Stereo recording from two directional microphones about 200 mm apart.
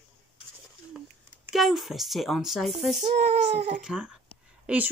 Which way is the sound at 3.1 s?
35° right (ahead or behind).